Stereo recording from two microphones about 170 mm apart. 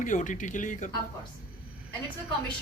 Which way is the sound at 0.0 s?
50° left (ahead or behind).